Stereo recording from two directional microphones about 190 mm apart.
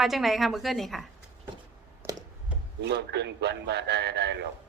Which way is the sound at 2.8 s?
65° right (ahead or behind).